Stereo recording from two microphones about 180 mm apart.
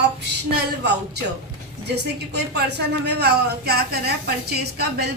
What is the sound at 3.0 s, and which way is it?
A woman's voice, 65° right (ahead or behind).